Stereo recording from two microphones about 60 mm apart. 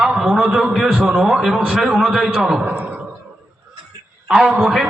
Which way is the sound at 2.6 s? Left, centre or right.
Right.